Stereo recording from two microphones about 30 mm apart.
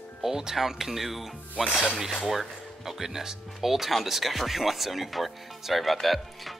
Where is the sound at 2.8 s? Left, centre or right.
Centre.